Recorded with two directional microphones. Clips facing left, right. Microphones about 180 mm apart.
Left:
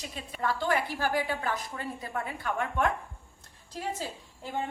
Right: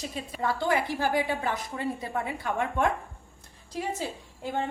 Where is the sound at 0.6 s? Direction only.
15° right (ahead or behind).